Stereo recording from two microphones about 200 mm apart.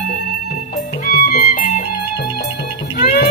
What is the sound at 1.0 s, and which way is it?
Music, 45° left (ahead or behind).